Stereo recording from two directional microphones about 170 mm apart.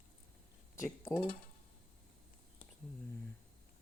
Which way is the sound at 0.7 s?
20° left (ahead or behind).